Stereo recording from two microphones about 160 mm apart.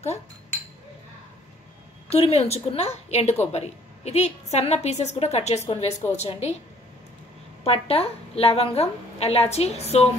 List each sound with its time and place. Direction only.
2.0 s a woman's voice: 40° left (ahead or behind)
7.6 s a woman's voice: 40° left (ahead or behind)